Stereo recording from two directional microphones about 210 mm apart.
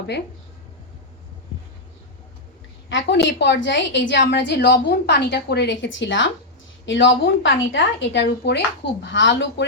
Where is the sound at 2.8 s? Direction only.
60° left (ahead or behind).